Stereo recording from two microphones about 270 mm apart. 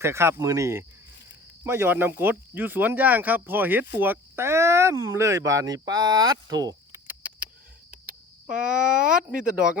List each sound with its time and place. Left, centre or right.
0.0 s speech: centre
8.4 s speech: centre
9.5 s speech: right